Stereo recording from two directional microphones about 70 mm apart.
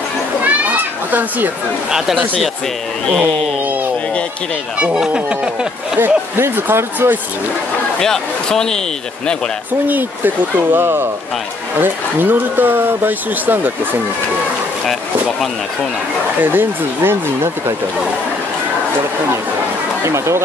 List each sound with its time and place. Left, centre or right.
0.4 s children playing: right
1.9 s speech: centre
4.7 s speech: centre
5.9 s speech: right
8.0 s speech: centre
9.8 s speech: right
16.5 s speech: right
20.0 s speech: right